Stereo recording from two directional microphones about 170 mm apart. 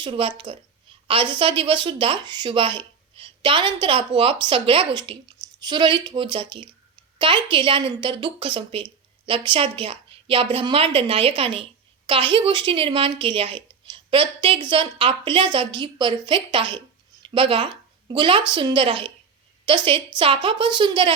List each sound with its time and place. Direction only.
0.0 s a woman's voice: 30° right (ahead or behind)